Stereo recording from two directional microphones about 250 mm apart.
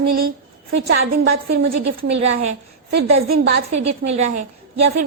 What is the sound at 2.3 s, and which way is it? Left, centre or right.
Speech, right.